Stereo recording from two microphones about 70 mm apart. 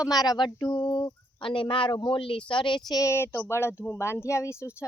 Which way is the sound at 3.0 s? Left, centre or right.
Left.